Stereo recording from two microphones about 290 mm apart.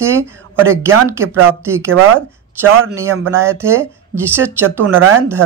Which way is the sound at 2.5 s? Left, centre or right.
Centre.